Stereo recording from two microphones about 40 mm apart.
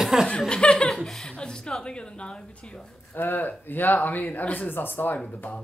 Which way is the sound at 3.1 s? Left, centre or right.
Left.